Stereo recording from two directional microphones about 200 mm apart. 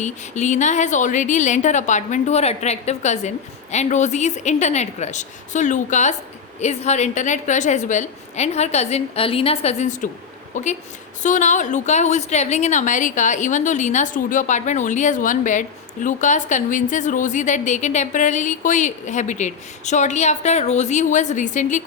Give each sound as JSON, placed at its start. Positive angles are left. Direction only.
{"t": 0.0, "sound": "a woman's voice", "side_deg": 35}